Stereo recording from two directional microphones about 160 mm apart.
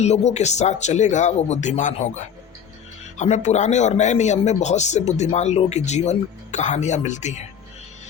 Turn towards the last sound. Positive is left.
turn(degrees=45)  # may be behind; listen again after turning